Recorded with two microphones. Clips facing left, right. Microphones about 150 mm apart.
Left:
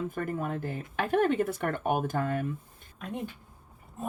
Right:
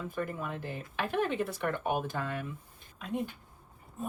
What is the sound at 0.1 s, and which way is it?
Speech, 50° left (ahead or behind).